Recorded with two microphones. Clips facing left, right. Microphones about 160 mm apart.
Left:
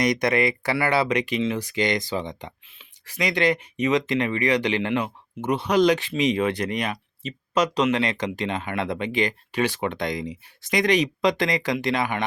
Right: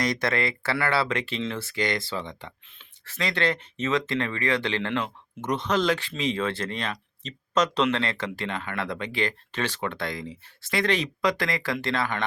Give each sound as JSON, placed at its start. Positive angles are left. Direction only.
{"t": 0.0, "sound": "speech", "side_deg": 15}